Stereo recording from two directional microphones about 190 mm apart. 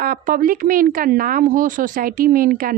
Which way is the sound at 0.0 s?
50° right (ahead or behind).